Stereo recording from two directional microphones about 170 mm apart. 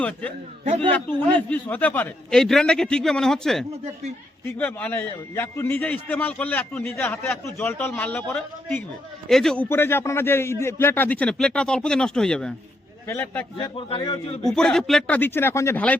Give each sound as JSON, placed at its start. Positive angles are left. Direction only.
{"t": 0.0, "sound": "a man's voice", "side_deg": 10}
{"t": 9.6, "sound": "a man's voice", "side_deg": 15}
{"t": 13.7, "sound": "a man's voice", "side_deg": 30}
{"t": 14.4, "sound": "a man's voice", "side_deg": 5}